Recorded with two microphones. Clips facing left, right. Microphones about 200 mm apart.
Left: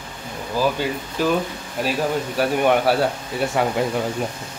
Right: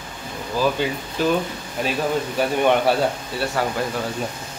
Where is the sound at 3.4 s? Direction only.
20° left (ahead or behind).